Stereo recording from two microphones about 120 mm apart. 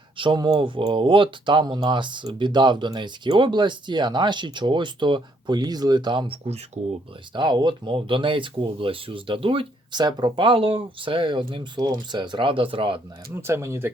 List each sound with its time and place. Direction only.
0.2 s speech: 40° right (ahead or behind)
7.3 s speech: 40° right (ahead or behind)
13.3 s speech: 20° right (ahead or behind)